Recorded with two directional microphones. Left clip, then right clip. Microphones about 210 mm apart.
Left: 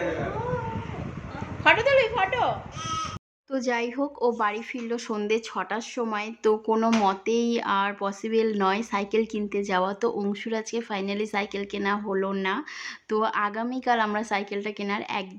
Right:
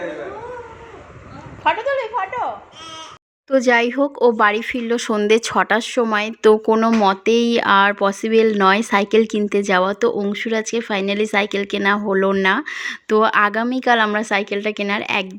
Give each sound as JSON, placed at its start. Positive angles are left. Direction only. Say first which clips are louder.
{"t": 1.6, "sound": "speech", "louder": "right 1 dB", "side_deg": 10}
{"t": 3.5, "sound": "speech", "louder": "right 12 dB", "side_deg": -25}